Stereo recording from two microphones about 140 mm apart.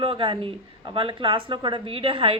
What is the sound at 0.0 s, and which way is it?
Speech, 35° right (ahead or behind).